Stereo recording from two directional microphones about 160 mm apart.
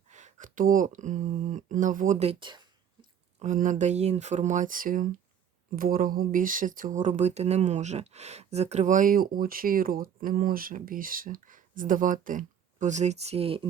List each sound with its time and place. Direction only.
0.1 s speech: 50° right (ahead or behind); by 3.1 s 30° right (ahead or behind)
3.4 s speech: 50° right (ahead or behind); by 13.7 s 35° right (ahead or behind)